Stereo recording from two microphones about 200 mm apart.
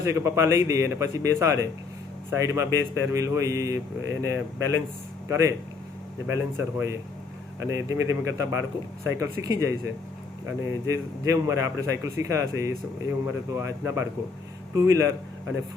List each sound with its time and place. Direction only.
0.0 s a man's voice: 15° right (ahead or behind)